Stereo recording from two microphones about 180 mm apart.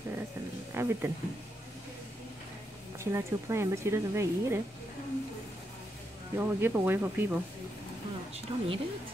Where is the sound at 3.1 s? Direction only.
15° right (ahead or behind).